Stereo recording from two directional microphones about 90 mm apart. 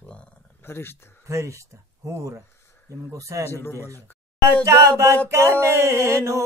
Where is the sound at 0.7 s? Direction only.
25° left (ahead or behind).